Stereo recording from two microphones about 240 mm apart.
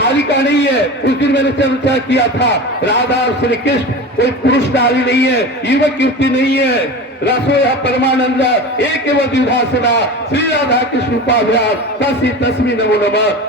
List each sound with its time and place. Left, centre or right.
0.0 s a man's voice: left
4.2 s a man's voice: left